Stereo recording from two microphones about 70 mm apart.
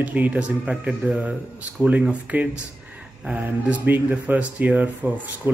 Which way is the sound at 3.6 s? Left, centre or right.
Right.